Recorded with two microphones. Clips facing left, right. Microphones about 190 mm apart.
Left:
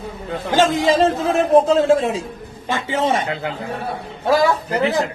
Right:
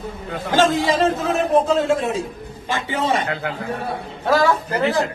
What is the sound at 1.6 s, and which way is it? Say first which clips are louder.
A man's voice: left 3 dB; 30° left (ahead or behind).